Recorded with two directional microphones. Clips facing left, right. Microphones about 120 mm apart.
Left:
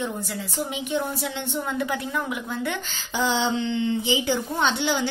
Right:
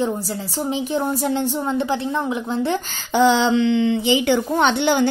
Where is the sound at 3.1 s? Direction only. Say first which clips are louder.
Right 8 dB; 75° right (ahead or behind); by 5.0 s 60° right (ahead or behind).